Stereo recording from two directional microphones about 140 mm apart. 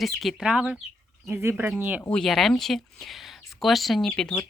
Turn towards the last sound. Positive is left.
turn(degrees=5)  # may be behind; listen again after turning